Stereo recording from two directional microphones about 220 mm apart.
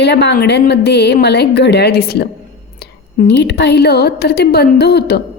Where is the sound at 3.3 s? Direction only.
50° left (ahead or behind).